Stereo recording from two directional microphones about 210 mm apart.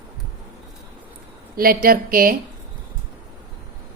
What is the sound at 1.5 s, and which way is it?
Speech, 45° right (ahead or behind).